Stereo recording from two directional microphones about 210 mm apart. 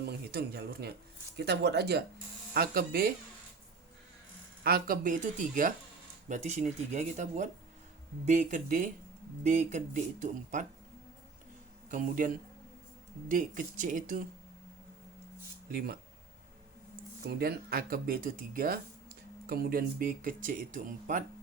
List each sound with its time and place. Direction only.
0.1 s speech: 50° right (ahead or behind)
4.6 s speech: 45° right (ahead or behind)
11.9 s speech: 40° right (ahead or behind)
17.2 s speech: 45° right (ahead or behind)